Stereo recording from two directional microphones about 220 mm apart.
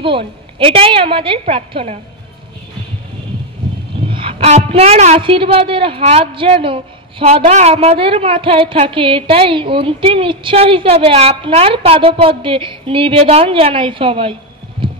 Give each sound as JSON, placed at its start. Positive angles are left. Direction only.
{"t": 0.0, "sound": "a woman's voice", "side_deg": -25}
{"t": 4.1, "sound": "a woman's voice", "side_deg": -25}
{"t": 14.8, "sound": "heart sounds", "side_deg": -25}